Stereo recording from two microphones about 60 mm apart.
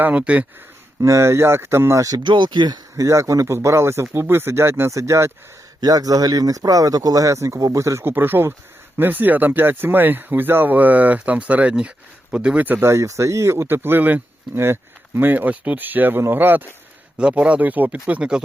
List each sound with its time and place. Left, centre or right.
0.0 s speech: right
1.0 s speech: right
2.0 s speech: right
2.9 s speech: right
4.9 s speech: right
5.8 s speech: right
8.0 s speech: right; by 12.6 s centre
12.8 s speech: right
15.3 s speech: right
17.2 s speech: centre
18.1 s speech: centre